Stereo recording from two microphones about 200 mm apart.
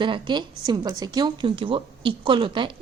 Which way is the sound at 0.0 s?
25° right (ahead or behind).